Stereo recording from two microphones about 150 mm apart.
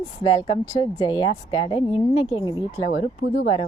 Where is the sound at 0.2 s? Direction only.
35° left (ahead or behind).